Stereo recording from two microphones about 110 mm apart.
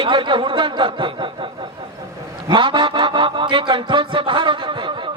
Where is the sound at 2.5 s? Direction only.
45° right (ahead or behind).